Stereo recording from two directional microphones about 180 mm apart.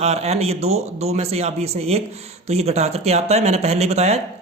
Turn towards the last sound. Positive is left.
turn(degrees=-35)  # may be behind; listen again after turning